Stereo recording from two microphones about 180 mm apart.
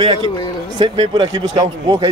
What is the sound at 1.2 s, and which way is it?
Speech, 20° right (ahead or behind).